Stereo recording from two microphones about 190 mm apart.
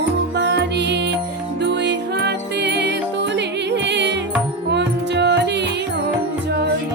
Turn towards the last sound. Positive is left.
turn(degrees=-65)  # may be behind; listen again after turning